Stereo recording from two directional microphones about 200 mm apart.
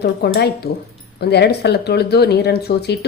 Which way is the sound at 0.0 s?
55° left (ahead or behind).